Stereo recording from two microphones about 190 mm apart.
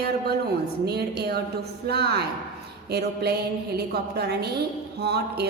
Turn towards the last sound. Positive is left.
turn(degrees=-60)  # may be behind; listen again after turning